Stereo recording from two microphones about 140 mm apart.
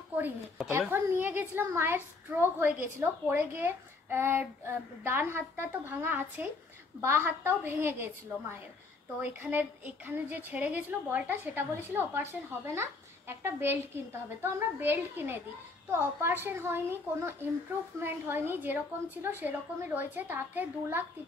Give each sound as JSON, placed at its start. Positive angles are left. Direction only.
{"t": 0.7, "sound": "a woman's voice", "side_deg": -15}